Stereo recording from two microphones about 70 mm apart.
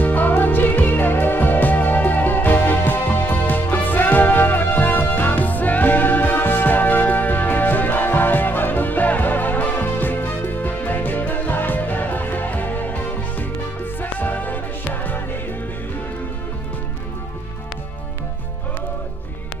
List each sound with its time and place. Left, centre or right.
0.0 s music: left